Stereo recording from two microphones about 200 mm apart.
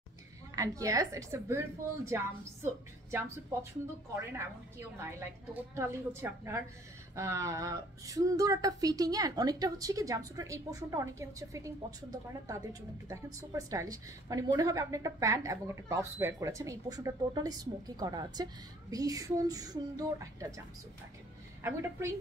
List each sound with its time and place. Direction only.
0.6 s a woman's voice: 15° right (ahead or behind)
4.7 s a woman's voice: 10° right (ahead or behind)
21.6 s a woman's voice: 15° right (ahead or behind)